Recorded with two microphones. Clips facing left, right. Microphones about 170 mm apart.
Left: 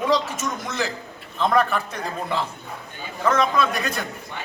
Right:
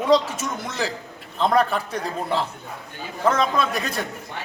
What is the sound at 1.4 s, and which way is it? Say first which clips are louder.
Speech: right 1 dB; 30° right (ahead or behind).